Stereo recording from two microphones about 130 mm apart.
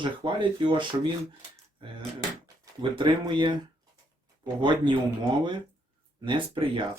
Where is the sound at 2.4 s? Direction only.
35° right (ahead or behind).